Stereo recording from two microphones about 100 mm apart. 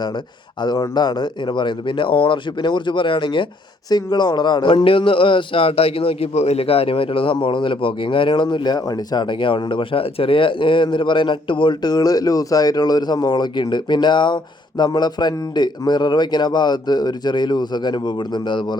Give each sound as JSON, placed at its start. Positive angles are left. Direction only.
{"t": 0.6, "sound": "speech", "side_deg": 45}
{"t": 3.8, "sound": "a man's voice", "side_deg": 45}